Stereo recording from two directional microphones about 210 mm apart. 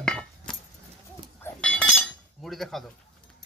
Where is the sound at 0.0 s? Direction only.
5° left (ahead or behind).